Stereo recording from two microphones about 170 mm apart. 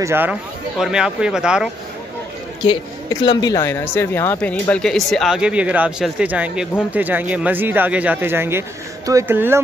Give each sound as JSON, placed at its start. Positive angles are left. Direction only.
{"t": 0.0, "sound": "speech", "side_deg": -10}
{"t": 2.6, "sound": "speech", "side_deg": 30}